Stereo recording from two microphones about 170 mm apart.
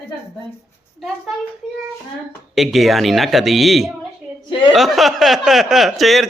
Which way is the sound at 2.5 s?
Centre (ahead or behind).